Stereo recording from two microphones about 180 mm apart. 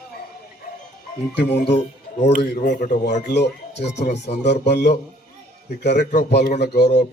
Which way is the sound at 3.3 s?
70° left (ahead or behind).